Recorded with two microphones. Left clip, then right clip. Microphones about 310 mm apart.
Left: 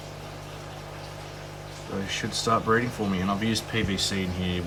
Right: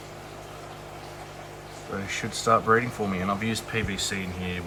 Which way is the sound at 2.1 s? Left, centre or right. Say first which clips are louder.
Right 2 dB; centre.